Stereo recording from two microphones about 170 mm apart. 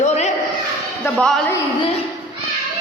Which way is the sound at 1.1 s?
5° left (ahead or behind).